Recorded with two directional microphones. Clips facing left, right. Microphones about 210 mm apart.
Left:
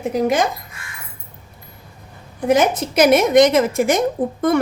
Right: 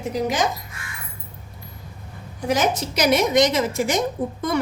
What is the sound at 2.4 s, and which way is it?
A woman's voice, 55° left (ahead or behind).